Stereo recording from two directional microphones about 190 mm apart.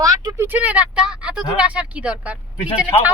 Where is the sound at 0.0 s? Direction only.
20° right (ahead or behind).